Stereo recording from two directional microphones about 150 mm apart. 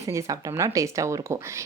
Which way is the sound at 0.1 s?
20° right (ahead or behind).